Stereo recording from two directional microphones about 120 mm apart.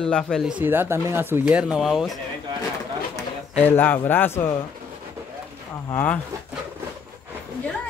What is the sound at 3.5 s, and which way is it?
Speech, 15° left (ahead or behind).